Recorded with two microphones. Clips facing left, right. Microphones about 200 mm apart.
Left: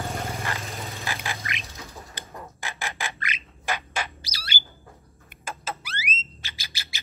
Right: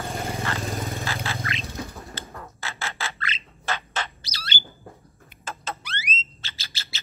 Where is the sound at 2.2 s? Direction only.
15° left (ahead or behind).